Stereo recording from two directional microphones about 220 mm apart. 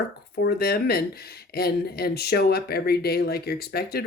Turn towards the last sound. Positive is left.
turn(degrees=45)  # may be behind; listen again after turning